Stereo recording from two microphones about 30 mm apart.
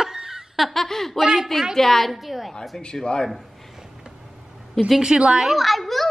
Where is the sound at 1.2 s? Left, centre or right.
Centre.